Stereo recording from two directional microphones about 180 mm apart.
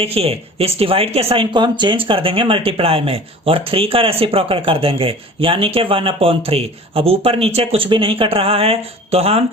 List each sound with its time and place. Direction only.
0.0 s speech: 35° right (ahead or behind)